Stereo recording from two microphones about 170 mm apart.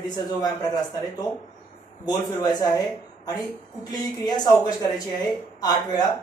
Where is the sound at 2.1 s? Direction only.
25° left (ahead or behind).